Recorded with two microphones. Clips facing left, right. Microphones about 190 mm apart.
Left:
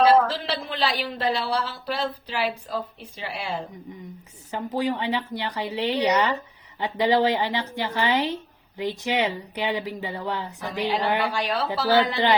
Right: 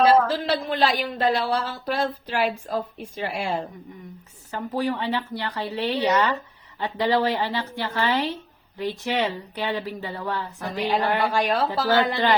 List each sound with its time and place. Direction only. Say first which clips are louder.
0.1 s speech: right 1 dB; 45° right (ahead or behind)
4.5 s speech: even; 15° left (ahead or behind)
10.8 s speech: right 1 dB; 50° right (ahead or behind)